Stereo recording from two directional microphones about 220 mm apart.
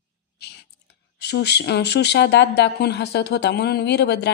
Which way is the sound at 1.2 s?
50° left (ahead or behind).